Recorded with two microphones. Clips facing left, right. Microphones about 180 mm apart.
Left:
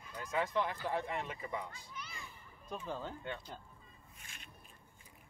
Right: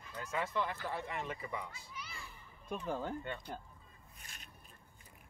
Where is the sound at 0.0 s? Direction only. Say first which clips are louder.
Left 2 dB; 10° left (ahead or behind).